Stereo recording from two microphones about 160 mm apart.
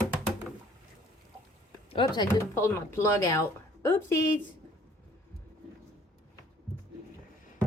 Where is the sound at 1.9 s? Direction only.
30° left (ahead or behind).